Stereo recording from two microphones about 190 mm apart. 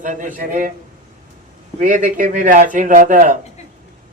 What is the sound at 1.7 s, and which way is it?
Speech, 45° right (ahead or behind).